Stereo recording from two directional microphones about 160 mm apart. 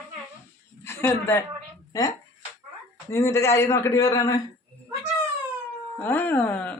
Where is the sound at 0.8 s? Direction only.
15° left (ahead or behind).